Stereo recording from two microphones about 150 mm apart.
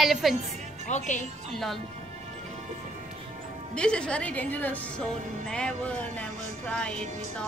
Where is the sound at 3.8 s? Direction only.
5° left (ahead or behind).